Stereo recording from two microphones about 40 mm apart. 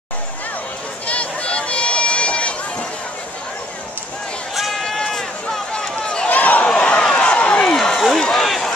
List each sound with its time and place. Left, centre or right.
1.0 s run: left
4.6 s run: centre
4.8 s run: centre
6.2 s a sound: left
7.0 s a sound: left
7.6 s run: centre